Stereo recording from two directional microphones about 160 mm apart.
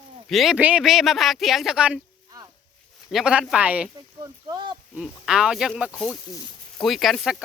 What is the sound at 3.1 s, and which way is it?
Speech, 5° right (ahead or behind).